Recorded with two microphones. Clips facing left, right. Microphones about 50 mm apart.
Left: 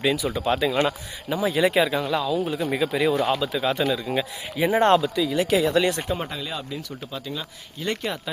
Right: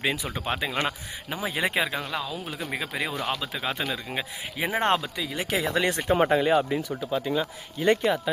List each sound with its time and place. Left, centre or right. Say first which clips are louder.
0.0 s speech: left 5 dB; right
7.1 s speech: right 8 dB; right
8.0 s speech: right 5 dB; centre